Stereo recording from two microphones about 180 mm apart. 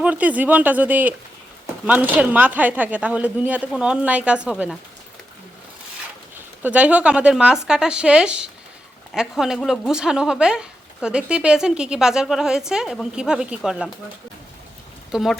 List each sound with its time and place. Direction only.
0.0 s speech: 10° right (ahead or behind)
6.6 s speech: 5° right (ahead or behind)
15.1 s speech: centre (ahead or behind)